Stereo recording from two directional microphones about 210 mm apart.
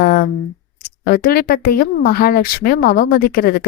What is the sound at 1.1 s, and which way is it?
A woman's voice, 45° left (ahead or behind).